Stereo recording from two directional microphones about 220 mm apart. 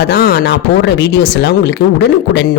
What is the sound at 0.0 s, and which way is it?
Speech, 45° left (ahead or behind).